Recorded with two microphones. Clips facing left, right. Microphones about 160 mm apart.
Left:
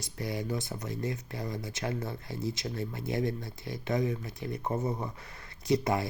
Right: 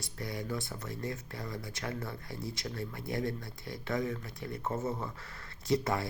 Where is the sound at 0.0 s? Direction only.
20° left (ahead or behind).